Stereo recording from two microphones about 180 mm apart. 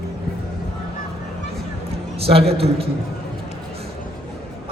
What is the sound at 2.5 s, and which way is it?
Speech, 30° right (ahead or behind).